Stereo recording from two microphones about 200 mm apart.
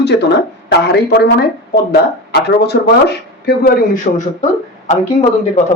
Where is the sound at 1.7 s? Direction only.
55° left (ahead or behind).